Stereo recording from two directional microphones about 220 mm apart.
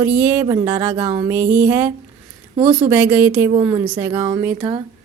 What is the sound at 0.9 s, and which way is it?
Speech, 25° right (ahead or behind).